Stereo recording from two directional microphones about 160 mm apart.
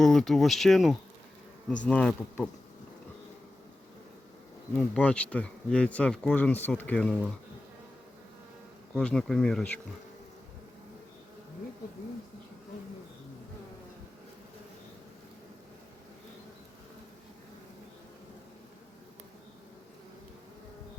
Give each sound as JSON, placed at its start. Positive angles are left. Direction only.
{"t": 0.0, "sound": "speech", "side_deg": 5}
{"t": 4.7, "sound": "speech", "side_deg": 10}
{"t": 9.0, "sound": "speech", "side_deg": 5}